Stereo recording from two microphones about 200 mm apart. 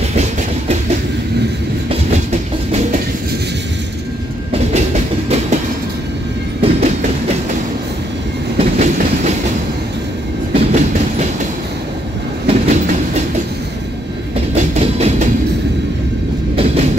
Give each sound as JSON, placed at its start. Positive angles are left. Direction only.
{"t": 0.1, "sound": "train", "side_deg": -35}
{"t": 4.9, "sound": "train", "side_deg": -35}
{"t": 6.6, "sound": "train", "side_deg": -35}
{"t": 8.5, "sound": "train", "side_deg": -35}
{"t": 10.5, "sound": "train", "side_deg": -35}
{"t": 12.4, "sound": "train", "side_deg": -35}
{"t": 14.5, "sound": "train", "side_deg": -30}